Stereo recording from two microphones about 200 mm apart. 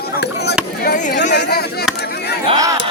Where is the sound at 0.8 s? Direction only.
45° left (ahead or behind).